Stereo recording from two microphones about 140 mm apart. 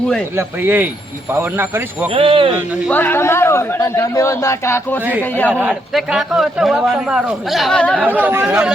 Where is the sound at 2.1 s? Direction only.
40° right (ahead or behind).